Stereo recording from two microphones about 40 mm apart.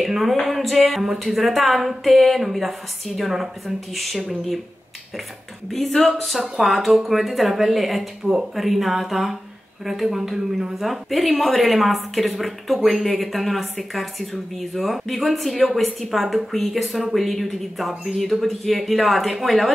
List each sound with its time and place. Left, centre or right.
0.0 s a woman's voice: centre
5.7 s a woman's voice: centre